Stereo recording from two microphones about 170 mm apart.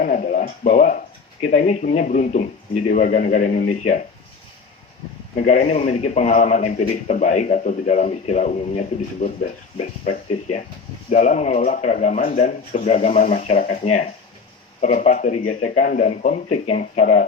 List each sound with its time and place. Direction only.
0.0 s a man's voice: 50° left (ahead or behind)
5.4 s a man's voice: 45° left (ahead or behind)
11.1 s a man's voice: 45° left (ahead or behind)